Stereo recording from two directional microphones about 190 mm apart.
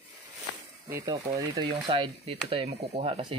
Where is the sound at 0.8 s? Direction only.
15° right (ahead or behind).